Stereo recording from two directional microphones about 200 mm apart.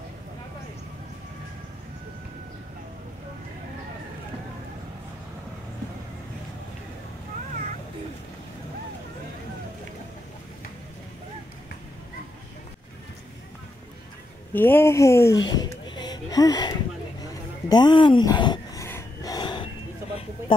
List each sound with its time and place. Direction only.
14.5 s speech: 10° left (ahead or behind)
15.3 s speech: 70° left (ahead or behind)
15.9 s a sound: 20° left (ahead or behind)